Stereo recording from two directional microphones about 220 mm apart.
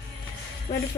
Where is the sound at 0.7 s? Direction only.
20° left (ahead or behind).